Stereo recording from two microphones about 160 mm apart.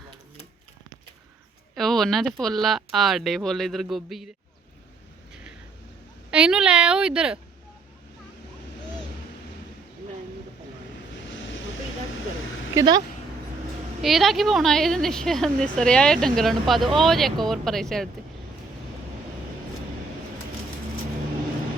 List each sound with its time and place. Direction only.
1.7 s speech: centre (ahead or behind)
6.3 s speech: 5° right (ahead or behind)
12.7 s speech: 25° right (ahead or behind)
14.0 s speech: centre (ahead or behind)